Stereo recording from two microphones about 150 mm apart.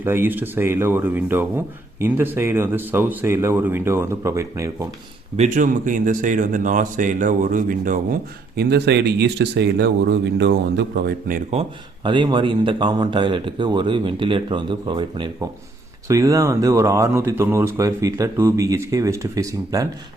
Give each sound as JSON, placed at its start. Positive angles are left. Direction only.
{"t": 0.0, "sound": "speech", "side_deg": -15}
{"t": 5.4, "sound": "speech", "side_deg": -60}
{"t": 8.5, "sound": "speech", "side_deg": -90}
{"t": 12.0, "sound": "speech", "side_deg": -30}
{"t": 16.0, "sound": "speech", "side_deg": -20}